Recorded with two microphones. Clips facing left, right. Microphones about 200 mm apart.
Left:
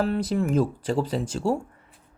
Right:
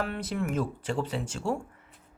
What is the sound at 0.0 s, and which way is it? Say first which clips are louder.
Speech: left 7 dB; 35° left (ahead or behind).